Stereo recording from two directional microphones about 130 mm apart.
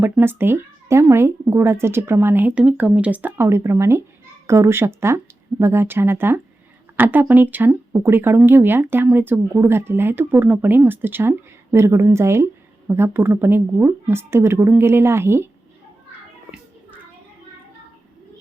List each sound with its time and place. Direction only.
0.0 s speech: 15° right (ahead or behind)